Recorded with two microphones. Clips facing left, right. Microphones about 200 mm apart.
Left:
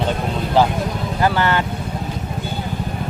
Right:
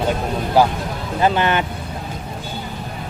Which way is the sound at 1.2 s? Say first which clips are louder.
Right 1 dB; 20° right (ahead or behind).